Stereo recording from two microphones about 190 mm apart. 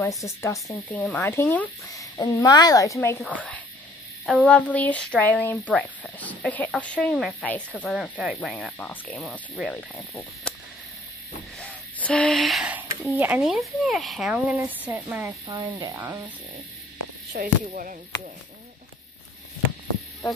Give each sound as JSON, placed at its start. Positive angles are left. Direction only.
{"t": 0.2, "sound": "speech", "side_deg": 15}
{"t": 4.4, "sound": "speech", "side_deg": 5}
{"t": 10.5, "sound": "cricket", "side_deg": 5}
{"t": 11.6, "sound": "speech", "side_deg": 5}
{"t": 17.3, "sound": "speech", "side_deg": -45}